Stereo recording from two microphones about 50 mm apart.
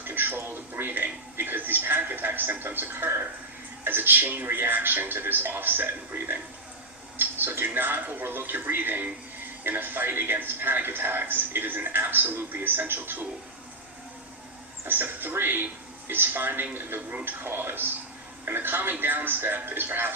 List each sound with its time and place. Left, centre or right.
0.0 s a man's voice: right
14.8 s a man's voice: right